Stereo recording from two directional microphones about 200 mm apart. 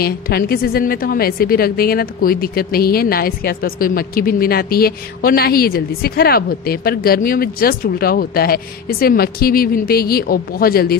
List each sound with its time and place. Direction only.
0.0 s a woman's voice: 50° left (ahead or behind)